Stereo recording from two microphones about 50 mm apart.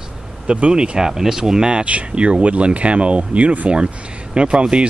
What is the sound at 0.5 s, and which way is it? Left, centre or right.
Speech, right.